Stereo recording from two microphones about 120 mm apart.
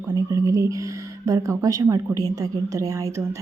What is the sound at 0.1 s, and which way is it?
A woman's voice, 30° right (ahead or behind).